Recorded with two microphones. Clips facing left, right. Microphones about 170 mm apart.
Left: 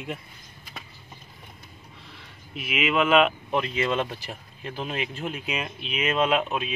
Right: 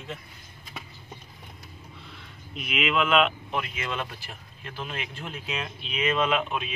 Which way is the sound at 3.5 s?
25° left (ahead or behind).